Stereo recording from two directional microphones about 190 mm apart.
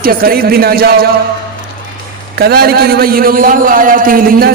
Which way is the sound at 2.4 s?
55° right (ahead or behind).